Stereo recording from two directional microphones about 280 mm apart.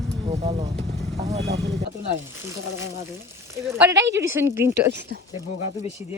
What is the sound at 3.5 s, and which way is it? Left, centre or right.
Speech, centre.